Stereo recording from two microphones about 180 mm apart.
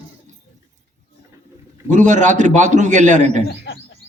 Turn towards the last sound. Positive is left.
turn(degrees=80)